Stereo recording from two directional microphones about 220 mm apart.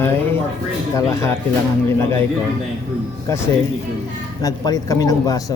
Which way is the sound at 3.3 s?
15° left (ahead or behind).